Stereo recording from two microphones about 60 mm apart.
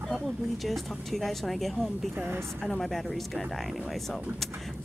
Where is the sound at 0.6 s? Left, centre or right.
Centre.